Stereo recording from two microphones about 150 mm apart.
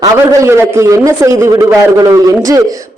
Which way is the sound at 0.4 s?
15° right (ahead or behind).